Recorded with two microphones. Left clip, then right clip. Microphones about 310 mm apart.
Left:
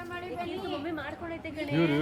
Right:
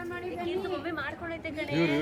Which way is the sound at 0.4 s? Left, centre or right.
Left.